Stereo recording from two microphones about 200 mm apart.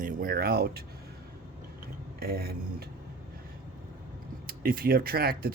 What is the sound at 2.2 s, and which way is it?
Speech, 50° right (ahead or behind).